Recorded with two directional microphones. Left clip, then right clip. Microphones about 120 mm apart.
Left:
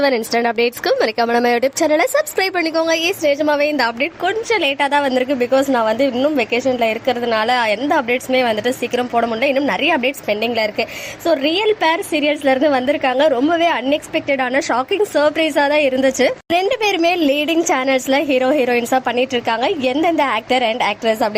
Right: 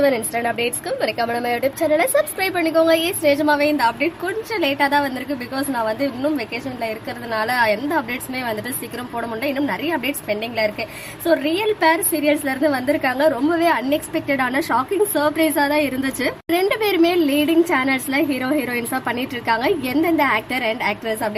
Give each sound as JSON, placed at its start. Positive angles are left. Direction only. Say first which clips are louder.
{"t": 0.0, "sound": "speech", "louder": "left 3 dB", "side_deg": 90}
{"t": 3.2, "sound": "a woman's voice", "louder": "left 1 dB", "side_deg": 25}
{"t": 14.5, "sound": "a woman's voice", "louder": "left 3 dB", "side_deg": 30}